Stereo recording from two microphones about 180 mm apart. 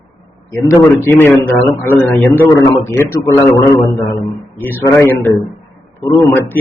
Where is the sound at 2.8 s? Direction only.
15° left (ahead or behind).